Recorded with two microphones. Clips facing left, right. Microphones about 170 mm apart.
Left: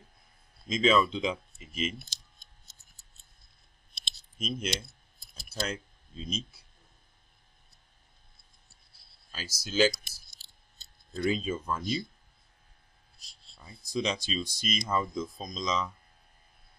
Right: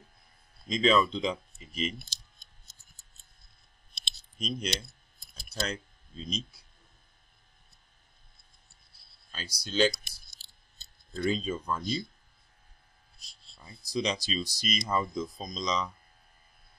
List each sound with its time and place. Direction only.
0.7 s speech: centre (ahead or behind)
4.4 s speech: 5° left (ahead or behind)
9.3 s speech: 5° left (ahead or behind)
13.9 s speech: centre (ahead or behind)